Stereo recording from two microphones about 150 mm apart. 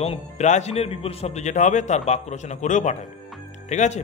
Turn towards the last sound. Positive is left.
turn(degrees=50)  # may be behind; listen again after turning